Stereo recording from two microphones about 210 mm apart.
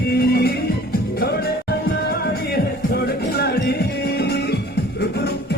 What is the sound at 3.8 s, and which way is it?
Music, 50° left (ahead or behind).